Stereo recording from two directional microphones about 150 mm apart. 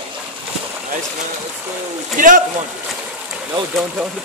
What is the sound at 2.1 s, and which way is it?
Speech, 60° right (ahead or behind).